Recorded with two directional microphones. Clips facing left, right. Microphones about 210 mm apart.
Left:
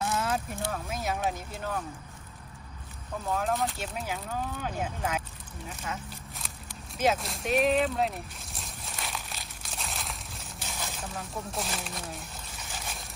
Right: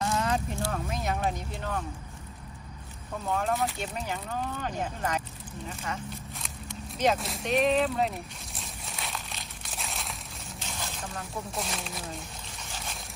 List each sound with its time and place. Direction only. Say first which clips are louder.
0.0 s a sound: right 2 dB; 5° left (ahead or behind)
0.7 s speech: even; centre (ahead or behind)
3.2 s speech: right 1 dB; centre (ahead or behind)
7.0 s boat: even; centre (ahead or behind)